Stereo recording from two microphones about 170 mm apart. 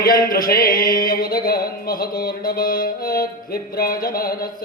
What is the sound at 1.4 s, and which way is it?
Mantra, 60° left (ahead or behind).